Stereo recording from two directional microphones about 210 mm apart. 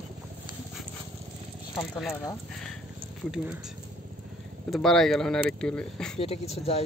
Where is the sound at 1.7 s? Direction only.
5° left (ahead or behind).